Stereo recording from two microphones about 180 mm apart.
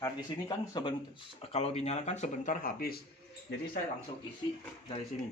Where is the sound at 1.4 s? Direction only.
35° left (ahead or behind); by 3.0 s 55° left (ahead or behind).